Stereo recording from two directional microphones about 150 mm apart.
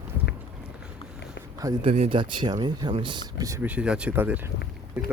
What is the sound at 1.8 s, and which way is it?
Speech, 45° right (ahead or behind).